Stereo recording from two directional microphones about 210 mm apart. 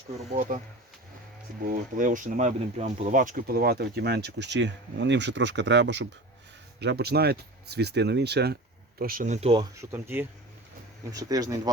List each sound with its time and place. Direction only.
0.5 s speech: 40° right (ahead or behind)
9.9 s speech: 10° right (ahead or behind)